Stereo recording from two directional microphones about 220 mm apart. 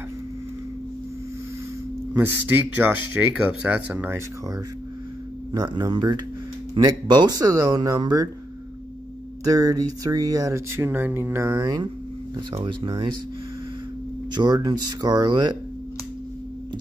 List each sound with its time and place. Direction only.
2.1 s speech: 10° right (ahead or behind)
9.4 s speech: 15° right (ahead or behind)
14.3 s speech: 20° right (ahead or behind)